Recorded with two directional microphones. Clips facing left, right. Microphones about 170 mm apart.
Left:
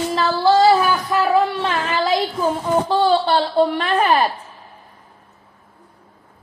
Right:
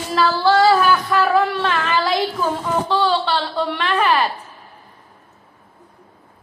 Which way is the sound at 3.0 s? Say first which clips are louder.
Left 3 dB; 50° left (ahead or behind).